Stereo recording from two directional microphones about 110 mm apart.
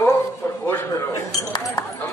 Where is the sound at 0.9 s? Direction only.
30° left (ahead or behind).